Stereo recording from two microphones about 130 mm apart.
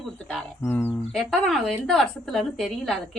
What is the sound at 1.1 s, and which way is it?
A woman's voice, centre (ahead or behind).